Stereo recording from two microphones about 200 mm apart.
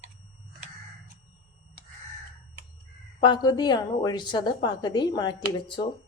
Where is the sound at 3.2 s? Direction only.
20° left (ahead or behind).